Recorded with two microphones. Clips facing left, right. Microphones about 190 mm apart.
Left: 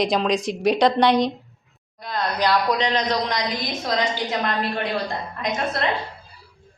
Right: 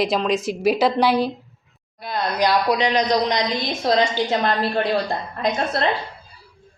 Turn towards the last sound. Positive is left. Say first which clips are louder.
# right 3 dB
turn(degrees=-30)  # may be behind; listen again after turning